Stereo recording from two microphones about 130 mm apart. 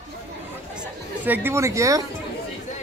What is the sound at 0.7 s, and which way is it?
Chatter, 10° right (ahead or behind).